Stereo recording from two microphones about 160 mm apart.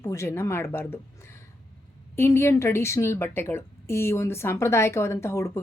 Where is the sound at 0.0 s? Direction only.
15° left (ahead or behind).